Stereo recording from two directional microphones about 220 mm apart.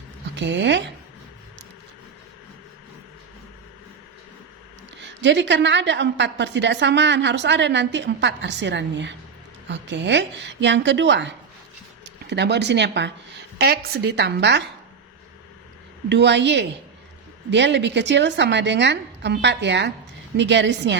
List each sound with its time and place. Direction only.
0.3 s a woman's voice: 55° right (ahead or behind)
4.9 s a woman's voice: 55° right (ahead or behind)
16.0 s a woman's voice: 50° right (ahead or behind)